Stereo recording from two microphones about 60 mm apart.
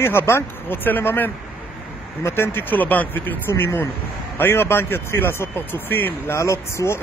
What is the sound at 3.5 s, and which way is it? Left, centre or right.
Speech, left.